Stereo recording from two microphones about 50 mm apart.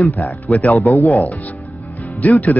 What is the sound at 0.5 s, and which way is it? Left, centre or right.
Speech, left.